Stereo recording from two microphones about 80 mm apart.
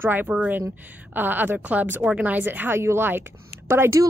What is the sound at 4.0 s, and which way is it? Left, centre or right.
Speech, right.